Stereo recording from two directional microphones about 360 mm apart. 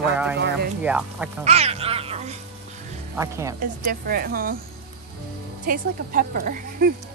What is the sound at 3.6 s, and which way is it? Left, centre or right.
Speech, right.